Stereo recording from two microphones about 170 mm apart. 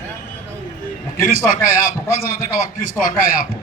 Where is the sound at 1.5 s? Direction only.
55° left (ahead or behind).